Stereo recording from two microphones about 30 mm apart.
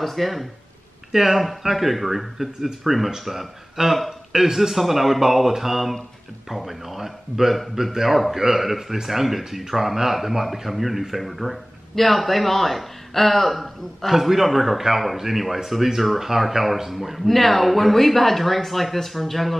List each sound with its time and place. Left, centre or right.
0.0 s speech: centre
1.1 s speech: centre
3.8 s a man's voice: right; by 11.5 s centre
11.9 s speech: centre
17.3 s speech: centre